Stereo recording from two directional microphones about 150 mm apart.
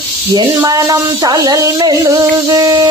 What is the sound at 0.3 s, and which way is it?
Speech, 25° right (ahead or behind).